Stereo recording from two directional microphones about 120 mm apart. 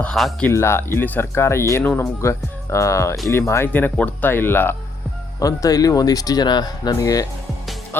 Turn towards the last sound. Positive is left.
turn(degrees=30)  # may be behind; listen again after turning